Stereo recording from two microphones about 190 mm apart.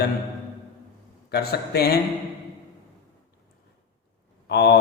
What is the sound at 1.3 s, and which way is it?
Speech, 55° left (ahead or behind).